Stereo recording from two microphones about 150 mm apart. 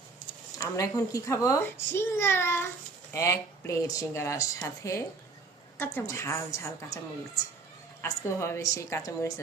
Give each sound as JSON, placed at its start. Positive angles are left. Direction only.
{"t": 0.6, "sound": "a child's voice", "side_deg": 25}
{"t": 8.0, "sound": "speech", "side_deg": 20}